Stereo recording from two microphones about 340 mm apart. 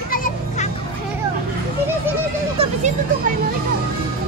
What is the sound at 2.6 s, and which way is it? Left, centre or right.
Speech, centre.